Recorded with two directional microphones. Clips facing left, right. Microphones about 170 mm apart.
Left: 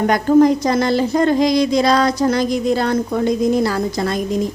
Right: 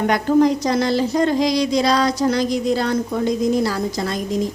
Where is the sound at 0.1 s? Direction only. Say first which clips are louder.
Left 4 dB; 45° left (ahead or behind).